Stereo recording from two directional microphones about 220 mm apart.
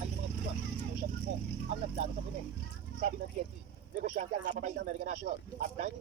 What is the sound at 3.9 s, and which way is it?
Speech, 35° right (ahead or behind).